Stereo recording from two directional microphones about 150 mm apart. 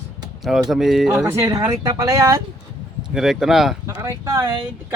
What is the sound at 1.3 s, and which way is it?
Speech, 20° right (ahead or behind).